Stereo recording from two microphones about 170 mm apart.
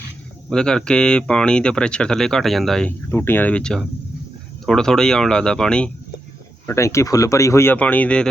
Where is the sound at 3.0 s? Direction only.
15° left (ahead or behind).